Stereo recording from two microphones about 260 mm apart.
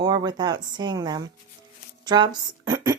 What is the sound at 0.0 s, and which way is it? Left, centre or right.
Speech, centre.